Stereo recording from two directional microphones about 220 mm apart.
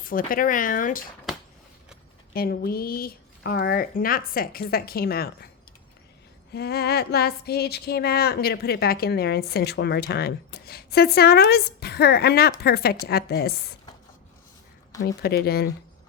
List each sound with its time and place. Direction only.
0.0 s speech: 40° left (ahead or behind)
2.3 s female singing: 45° left (ahead or behind)
6.5 s female singing: 45° left (ahead or behind)
15.0 s female singing: 45° left (ahead or behind)